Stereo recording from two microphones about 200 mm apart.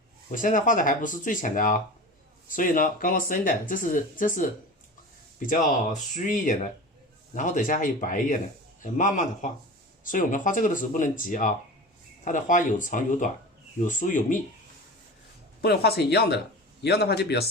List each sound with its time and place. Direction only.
0.3 s speech: 40° left (ahead or behind)
15.6 s speech: 55° left (ahead or behind)